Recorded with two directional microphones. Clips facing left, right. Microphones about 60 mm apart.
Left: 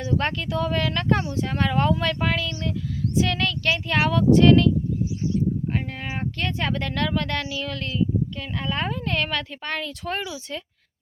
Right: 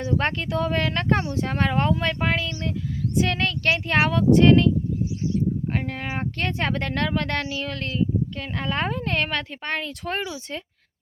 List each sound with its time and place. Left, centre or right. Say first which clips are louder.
0.0 s speech: right 1 dB; right
5.7 s speech: right 1 dB; right